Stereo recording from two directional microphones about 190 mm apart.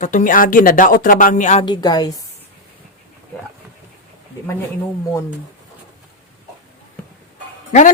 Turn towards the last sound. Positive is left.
turn(degrees=40)  # may be behind; listen again after turning